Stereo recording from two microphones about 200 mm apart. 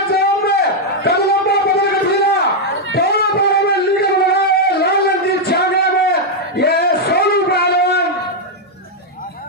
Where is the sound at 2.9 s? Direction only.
55° left (ahead or behind).